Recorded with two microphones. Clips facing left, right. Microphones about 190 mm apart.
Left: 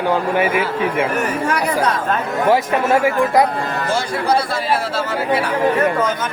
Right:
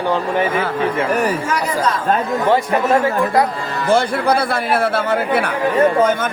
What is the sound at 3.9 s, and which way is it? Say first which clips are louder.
A man's voice: right 5 dB; 55° right (ahead or behind).